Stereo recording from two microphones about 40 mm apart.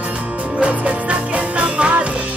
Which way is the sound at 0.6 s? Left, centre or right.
Right.